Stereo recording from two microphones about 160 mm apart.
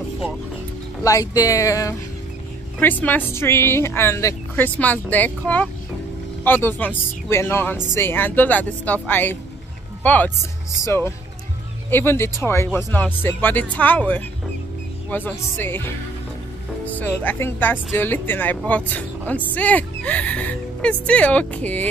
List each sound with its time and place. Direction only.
1.0 s speech: 20° left (ahead or behind)
16.9 s speech: 10° left (ahead or behind)